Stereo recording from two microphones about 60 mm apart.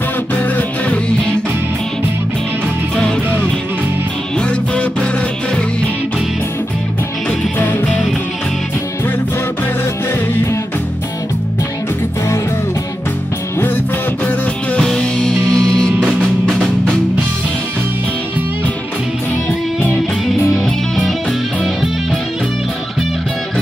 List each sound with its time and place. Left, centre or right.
0.4 s music: left
4.4 s music: centre
7.5 s music: left
14.8 s music: centre